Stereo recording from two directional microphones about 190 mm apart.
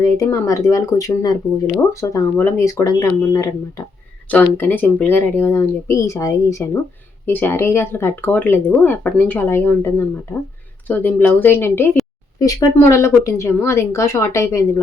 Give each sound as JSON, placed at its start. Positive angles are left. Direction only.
{"t": 0.0, "sound": "speech", "side_deg": 15}